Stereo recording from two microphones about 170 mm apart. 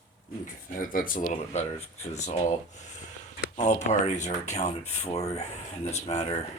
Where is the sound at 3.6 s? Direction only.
45° left (ahead or behind).